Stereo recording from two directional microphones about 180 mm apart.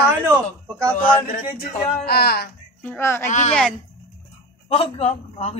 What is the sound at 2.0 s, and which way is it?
Speech, 60° left (ahead or behind).